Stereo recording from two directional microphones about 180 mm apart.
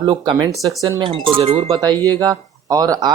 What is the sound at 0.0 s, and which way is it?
Speech, 25° right (ahead or behind).